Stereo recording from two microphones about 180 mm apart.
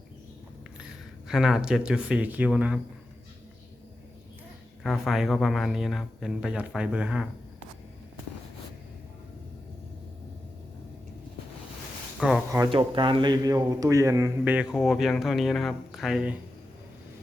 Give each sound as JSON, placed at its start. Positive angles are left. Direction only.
{"t": 1.3, "sound": "speech", "side_deg": -5}
{"t": 4.8, "sound": "speech", "side_deg": 0}
{"t": 12.5, "sound": "speech", "side_deg": -20}
{"t": 12.7, "sound": "speech", "side_deg": -30}